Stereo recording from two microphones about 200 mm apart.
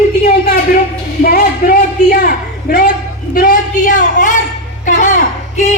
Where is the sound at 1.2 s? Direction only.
45° left (ahead or behind).